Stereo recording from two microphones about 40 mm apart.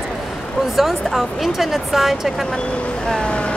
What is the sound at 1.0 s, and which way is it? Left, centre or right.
Speech, centre.